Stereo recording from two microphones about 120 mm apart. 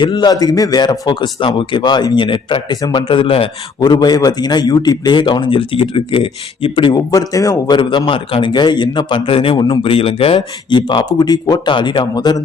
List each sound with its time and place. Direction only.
0.0 s a man's voice: 40° left (ahead or behind)
3.8 s a man's voice: 35° left (ahead or behind)
6.9 s a man's voice: 30° left (ahead or behind)